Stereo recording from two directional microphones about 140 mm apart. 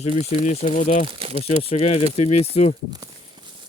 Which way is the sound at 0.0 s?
50° left (ahead or behind).